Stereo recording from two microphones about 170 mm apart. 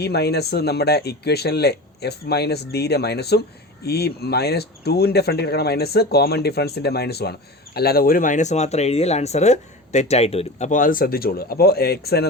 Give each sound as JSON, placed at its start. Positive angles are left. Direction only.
{"t": 0.0, "sound": "speech", "side_deg": 70}